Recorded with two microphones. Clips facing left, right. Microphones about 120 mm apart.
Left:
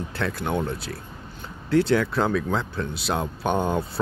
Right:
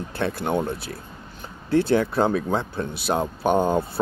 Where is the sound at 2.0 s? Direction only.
30° right (ahead or behind).